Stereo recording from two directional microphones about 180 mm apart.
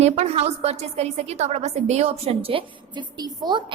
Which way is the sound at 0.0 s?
35° right (ahead or behind).